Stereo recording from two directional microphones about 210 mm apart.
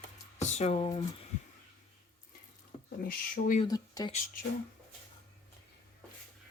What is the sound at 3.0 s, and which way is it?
Speech, 45° left (ahead or behind).